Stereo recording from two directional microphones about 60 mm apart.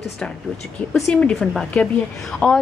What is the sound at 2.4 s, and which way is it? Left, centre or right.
Speech, left.